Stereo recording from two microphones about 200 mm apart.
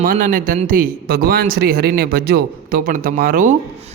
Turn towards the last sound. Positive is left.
turn(degrees=-45)  # may be behind; listen again after turning